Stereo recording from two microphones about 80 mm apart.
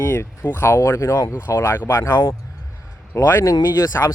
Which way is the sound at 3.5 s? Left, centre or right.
Left.